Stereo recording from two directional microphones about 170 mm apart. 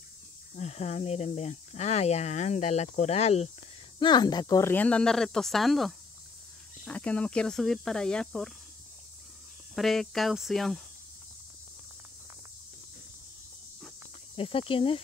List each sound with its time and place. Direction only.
0.6 s speech: 40° left (ahead or behind)
4.0 s speech: 25° left (ahead or behind); by 8.5 s 5° left (ahead or behind)
9.8 s speech: centre (ahead or behind)
14.3 s speech: 30° left (ahead or behind)